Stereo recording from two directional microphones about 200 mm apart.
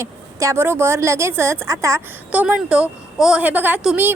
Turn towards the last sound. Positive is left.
turn(degrees=-5)  # may be behind; listen again after turning